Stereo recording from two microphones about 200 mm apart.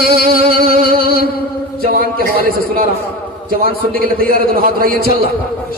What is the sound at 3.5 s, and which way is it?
Music, 45° right (ahead or behind).